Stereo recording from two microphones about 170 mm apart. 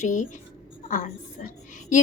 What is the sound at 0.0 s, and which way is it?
Speech, 45° left (ahead or behind).